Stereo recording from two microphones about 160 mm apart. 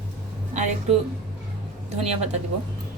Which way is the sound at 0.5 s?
50° right (ahead or behind).